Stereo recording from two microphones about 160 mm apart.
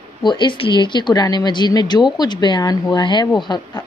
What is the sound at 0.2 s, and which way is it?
A woman's voice, 30° left (ahead or behind).